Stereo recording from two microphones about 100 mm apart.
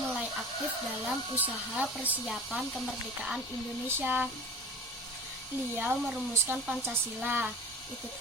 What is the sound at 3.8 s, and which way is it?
Speech, 20° right (ahead or behind).